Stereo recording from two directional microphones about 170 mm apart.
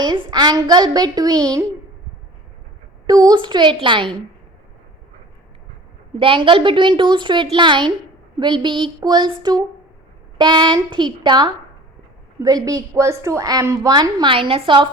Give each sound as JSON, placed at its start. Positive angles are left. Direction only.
{"t": 0.0, "sound": "a woman's voice", "side_deg": -25}
{"t": 3.1, "sound": "a woman's voice", "side_deg": -20}
{"t": 6.1, "sound": "a woman's voice", "side_deg": -30}